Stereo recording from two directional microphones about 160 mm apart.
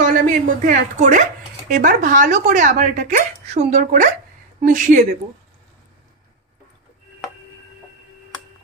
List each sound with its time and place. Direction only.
0.0 s speech: 55° right (ahead or behind)